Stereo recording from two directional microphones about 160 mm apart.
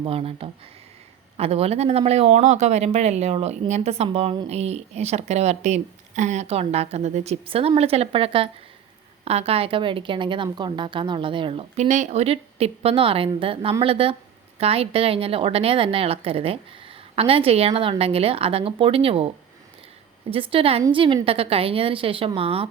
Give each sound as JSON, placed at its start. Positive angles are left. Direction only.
{"t": 0.0, "sound": "a woman's voice", "side_deg": -35}
{"t": 11.9, "sound": "a woman's voice", "side_deg": -50}
{"t": 20.3, "sound": "a woman's voice", "side_deg": -35}